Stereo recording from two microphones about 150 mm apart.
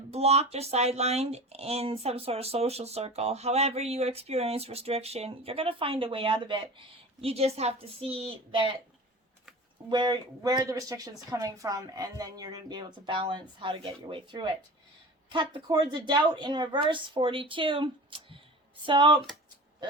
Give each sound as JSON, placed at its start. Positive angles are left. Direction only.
{"t": 0.1, "sound": "speech", "side_deg": -45}
{"t": 9.9, "sound": "a woman's voice", "side_deg": -30}